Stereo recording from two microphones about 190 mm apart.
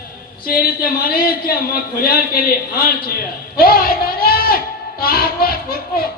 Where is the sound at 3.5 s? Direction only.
50° left (ahead or behind).